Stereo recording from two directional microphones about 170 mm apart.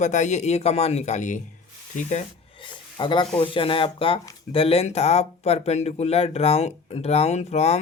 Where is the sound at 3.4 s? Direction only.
30° left (ahead or behind).